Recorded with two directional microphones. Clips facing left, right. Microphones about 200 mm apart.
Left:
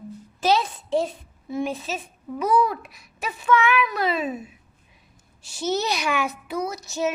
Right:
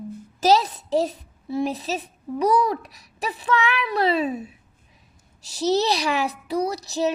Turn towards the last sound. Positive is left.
turn(degrees=-35)  # may be behind; listen again after turning